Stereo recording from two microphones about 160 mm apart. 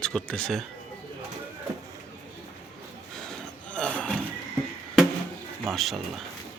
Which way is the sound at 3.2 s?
5° left (ahead or behind).